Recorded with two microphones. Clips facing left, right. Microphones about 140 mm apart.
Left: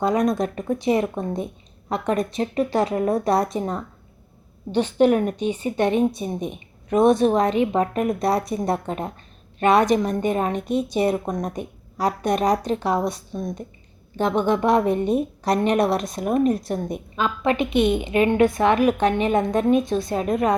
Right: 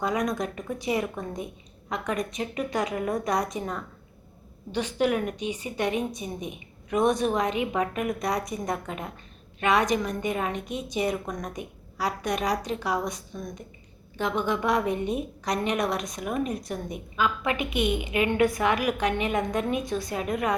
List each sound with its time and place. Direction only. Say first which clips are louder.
0.2 s a woman's voice: left 7 dB; 25° left (ahead or behind)
0.4 s speech: left 8 dB; 40° left (ahead or behind)
1.0 s a woman's voice: left 7 dB; 25° left (ahead or behind)